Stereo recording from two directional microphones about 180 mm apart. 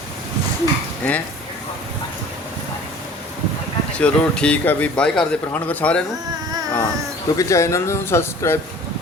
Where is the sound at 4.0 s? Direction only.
5° left (ahead or behind).